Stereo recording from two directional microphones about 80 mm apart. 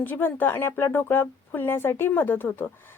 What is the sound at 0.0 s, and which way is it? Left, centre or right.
Speech, left.